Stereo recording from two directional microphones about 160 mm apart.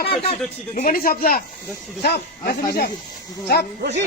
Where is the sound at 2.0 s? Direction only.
80° left.